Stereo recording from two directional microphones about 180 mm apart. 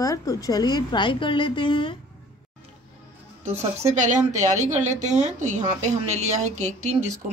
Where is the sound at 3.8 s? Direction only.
40° right (ahead or behind).